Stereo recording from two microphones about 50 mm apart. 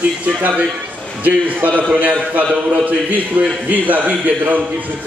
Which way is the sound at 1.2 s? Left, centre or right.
Right.